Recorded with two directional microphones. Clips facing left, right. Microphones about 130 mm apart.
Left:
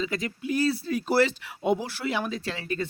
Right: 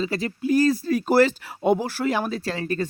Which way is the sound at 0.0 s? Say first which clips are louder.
Right 4 dB; 35° right (ahead or behind).